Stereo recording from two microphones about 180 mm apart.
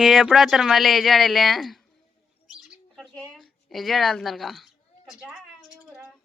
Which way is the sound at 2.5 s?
Centre (ahead or behind).